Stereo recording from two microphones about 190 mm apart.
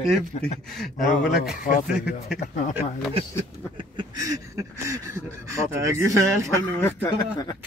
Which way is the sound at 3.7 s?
20° right (ahead or behind).